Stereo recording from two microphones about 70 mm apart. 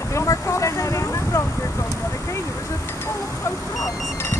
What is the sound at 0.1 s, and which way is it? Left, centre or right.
Vehicle, left.